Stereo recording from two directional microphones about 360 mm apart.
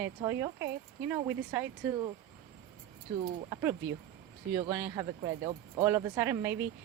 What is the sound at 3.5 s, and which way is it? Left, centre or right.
A woman's voice, centre.